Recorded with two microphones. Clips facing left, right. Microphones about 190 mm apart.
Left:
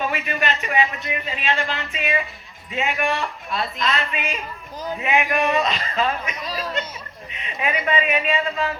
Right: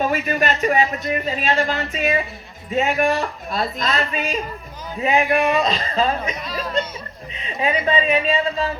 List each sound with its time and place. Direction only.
0.0 s speech: 40° right (ahead or behind)
7.3 s speech: 30° right (ahead or behind)